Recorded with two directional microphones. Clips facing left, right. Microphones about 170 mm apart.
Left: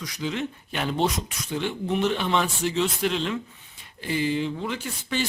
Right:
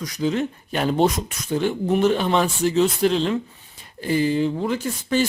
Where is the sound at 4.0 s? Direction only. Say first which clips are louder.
Right 6 dB; 40° right (ahead or behind).